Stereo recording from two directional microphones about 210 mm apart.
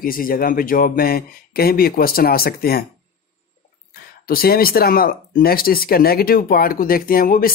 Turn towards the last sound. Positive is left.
turn(degrees=45)  # may be behind; listen again after turning